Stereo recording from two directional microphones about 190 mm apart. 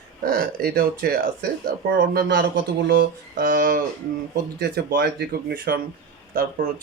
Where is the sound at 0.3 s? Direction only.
50° right (ahead or behind).